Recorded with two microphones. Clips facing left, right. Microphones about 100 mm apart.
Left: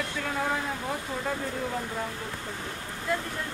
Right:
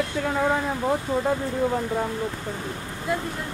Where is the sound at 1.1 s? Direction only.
30° right (ahead or behind).